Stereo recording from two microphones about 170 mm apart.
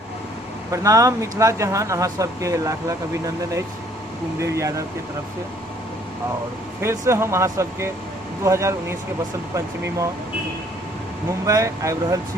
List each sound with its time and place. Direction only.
0.7 s speech: 20° right (ahead or behind)
4.4 s speech: 15° right (ahead or behind)
6.8 s speech: 15° right (ahead or behind)
11.4 s speech: 20° right (ahead or behind)